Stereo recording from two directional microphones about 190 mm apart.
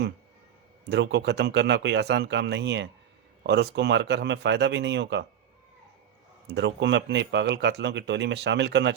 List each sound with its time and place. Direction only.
0.9 s speech: 65° right (ahead or behind)
6.5 s speech: 70° right (ahead or behind)